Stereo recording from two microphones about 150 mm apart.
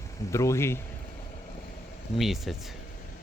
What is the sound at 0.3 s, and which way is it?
Speech, 20° left (ahead or behind).